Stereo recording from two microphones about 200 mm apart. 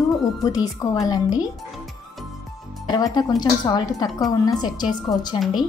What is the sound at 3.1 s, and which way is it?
A woman's voice, 20° left (ahead or behind).